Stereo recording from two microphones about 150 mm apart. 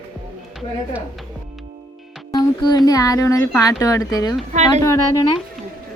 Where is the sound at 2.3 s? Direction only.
30° left (ahead or behind).